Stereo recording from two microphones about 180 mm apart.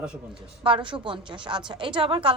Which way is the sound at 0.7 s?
30° right (ahead or behind).